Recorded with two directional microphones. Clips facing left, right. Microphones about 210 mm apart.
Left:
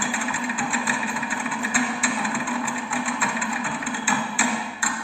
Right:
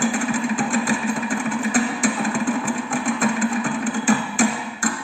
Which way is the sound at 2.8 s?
45° right (ahead or behind).